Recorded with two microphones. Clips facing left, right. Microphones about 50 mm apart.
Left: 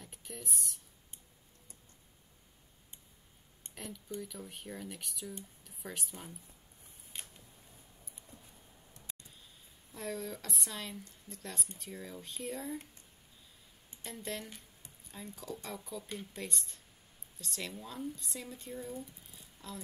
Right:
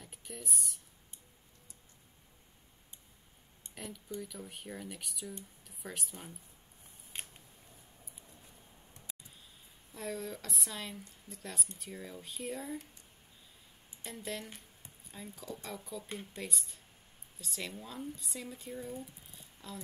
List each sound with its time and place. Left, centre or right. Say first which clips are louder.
0.0 s speech: even; centre
3.7 s speech: even; centre
7.1 s a sound: right 2 dB; right
9.1 s a sound: even; centre
9.9 s speech: even; centre
14.0 s speech: even; centre
16.0 s speech: even; centre
16.3 s speech: even; centre
19.3 s a sound: left 1 dB; centre